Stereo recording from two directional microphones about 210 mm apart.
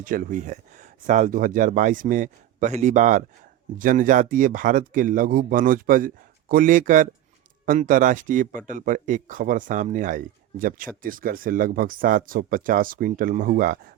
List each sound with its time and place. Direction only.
0.0 s a man's voice: 40° right (ahead or behind)